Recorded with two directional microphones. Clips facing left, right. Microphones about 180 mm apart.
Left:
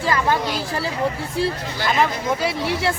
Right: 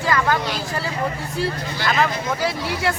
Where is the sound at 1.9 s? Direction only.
25° left (ahead or behind).